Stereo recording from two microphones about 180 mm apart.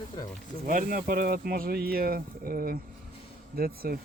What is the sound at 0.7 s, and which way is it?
Speech, 50° right (ahead or behind).